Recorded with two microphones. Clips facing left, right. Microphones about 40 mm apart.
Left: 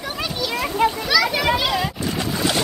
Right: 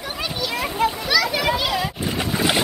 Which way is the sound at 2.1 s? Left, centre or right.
Centre.